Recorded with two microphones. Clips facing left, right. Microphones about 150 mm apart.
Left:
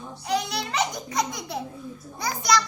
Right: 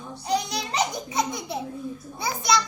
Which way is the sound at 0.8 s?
5° right (ahead or behind).